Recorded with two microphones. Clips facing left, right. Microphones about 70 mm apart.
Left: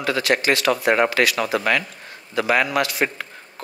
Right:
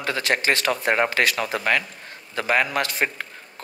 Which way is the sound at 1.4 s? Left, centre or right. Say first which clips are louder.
Left 4 dB; left.